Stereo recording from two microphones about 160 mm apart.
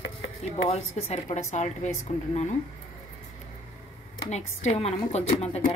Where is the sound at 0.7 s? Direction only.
40° left (ahead or behind).